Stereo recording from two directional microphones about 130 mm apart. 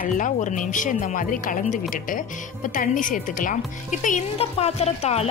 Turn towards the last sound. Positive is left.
turn(degrees=55)  # may be behind; listen again after turning